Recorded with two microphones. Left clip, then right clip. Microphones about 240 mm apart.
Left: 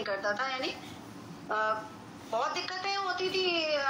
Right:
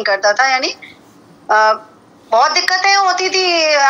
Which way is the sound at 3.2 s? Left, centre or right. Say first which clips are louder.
Right 16 dB; right.